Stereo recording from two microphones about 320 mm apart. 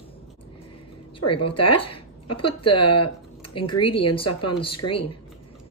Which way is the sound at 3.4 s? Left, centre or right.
Centre.